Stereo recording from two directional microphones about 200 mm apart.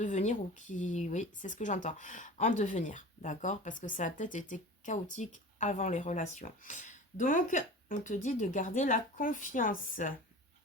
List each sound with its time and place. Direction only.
0.0 s speech: 35° left (ahead or behind)